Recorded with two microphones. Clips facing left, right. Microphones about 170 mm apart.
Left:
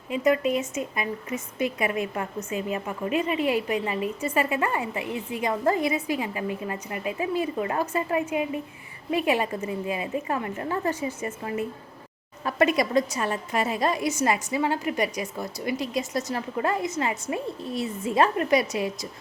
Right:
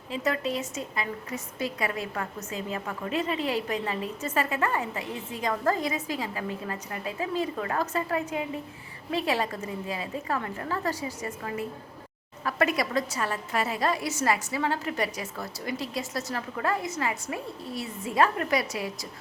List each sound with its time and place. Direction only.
0.1 s a woman's voice: 15° left (ahead or behind)